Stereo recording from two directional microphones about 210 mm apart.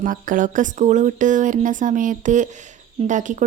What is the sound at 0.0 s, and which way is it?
Speech, 40° right (ahead or behind).